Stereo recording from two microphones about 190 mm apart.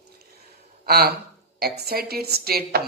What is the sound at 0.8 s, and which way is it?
Speech, 55° right (ahead or behind).